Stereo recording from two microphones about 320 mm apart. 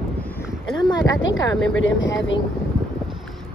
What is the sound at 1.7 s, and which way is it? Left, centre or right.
Speech, left.